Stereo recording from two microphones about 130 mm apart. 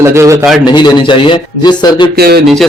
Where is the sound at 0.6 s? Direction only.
35° left (ahead or behind).